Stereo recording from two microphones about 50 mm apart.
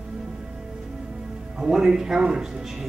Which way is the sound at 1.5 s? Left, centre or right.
Centre.